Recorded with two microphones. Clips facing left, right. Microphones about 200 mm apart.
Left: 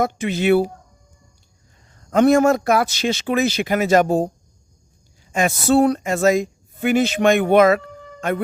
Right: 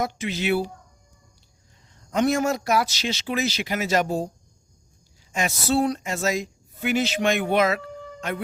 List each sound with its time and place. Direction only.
0.0 s speech: 55° left (ahead or behind)
2.0 s speech: 55° left (ahead or behind)
5.3 s speech: 50° left (ahead or behind)